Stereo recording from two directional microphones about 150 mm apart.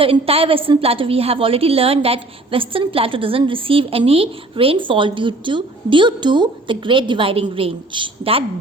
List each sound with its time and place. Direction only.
0.0 s a woman's voice: 40° right (ahead or behind)